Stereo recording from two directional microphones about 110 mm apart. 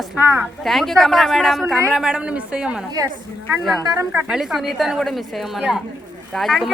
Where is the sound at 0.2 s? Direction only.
25° right (ahead or behind).